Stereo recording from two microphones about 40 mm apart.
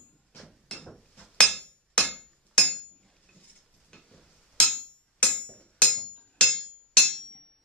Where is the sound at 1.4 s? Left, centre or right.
Left.